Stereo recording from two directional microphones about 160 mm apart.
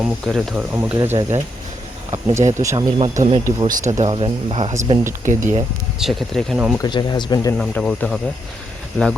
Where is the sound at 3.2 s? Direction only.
40° right (ahead or behind).